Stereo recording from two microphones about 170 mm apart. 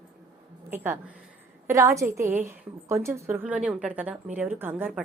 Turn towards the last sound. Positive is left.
turn(degrees=-10)  # may be behind; listen again after turning